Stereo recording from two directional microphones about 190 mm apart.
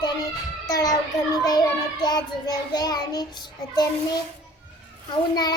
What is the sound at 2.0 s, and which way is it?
A child's voice, 20° left (ahead or behind).